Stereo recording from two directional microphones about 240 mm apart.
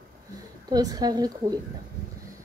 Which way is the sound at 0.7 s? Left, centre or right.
Centre.